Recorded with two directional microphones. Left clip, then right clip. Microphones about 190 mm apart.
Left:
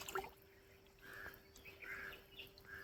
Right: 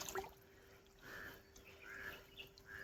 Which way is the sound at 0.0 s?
60° right (ahead or behind).